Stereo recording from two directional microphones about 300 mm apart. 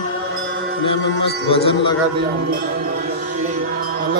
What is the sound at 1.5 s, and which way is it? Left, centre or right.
Speech, centre.